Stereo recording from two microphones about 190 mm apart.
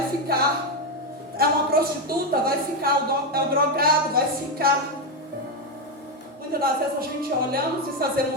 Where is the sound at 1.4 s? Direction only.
50° right (ahead or behind).